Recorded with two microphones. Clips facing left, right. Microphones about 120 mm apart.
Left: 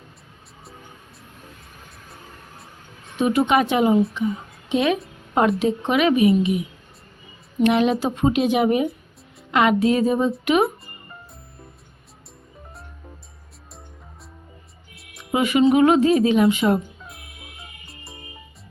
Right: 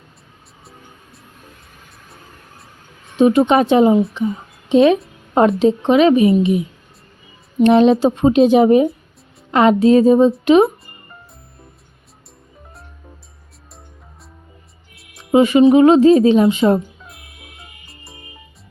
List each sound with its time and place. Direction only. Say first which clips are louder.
3.2 s speech: right 6 dB; 30° right (ahead or behind)
7.6 s speech: right 7 dB; 30° right (ahead or behind)
15.2 s speech: right 7 dB; 30° right (ahead or behind)
17.6 s music: even; centre (ahead or behind)